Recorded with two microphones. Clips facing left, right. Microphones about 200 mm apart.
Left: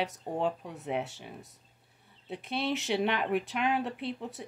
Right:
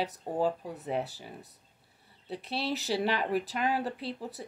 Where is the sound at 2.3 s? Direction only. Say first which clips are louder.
Left 1 dB; 35° right (ahead or behind).